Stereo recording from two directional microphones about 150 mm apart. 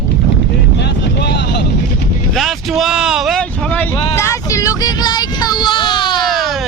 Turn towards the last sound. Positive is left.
turn(degrees=0)  # may be behind; listen again after turning